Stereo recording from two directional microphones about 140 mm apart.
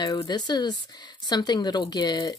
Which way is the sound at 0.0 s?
30° left (ahead or behind).